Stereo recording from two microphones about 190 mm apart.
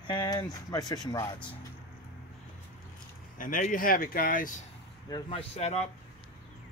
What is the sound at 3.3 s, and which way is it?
Speech, 45° left (ahead or behind).